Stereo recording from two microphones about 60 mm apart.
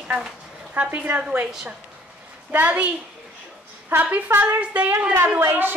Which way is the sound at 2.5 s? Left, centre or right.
Right.